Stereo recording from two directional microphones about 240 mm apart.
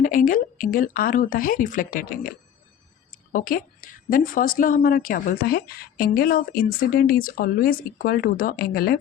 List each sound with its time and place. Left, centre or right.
0.0 s a woman's voice: left